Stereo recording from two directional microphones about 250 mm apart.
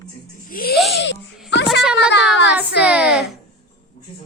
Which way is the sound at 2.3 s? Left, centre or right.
Left.